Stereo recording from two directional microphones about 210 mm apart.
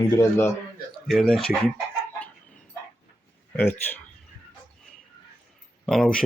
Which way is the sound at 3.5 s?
10° left (ahead or behind).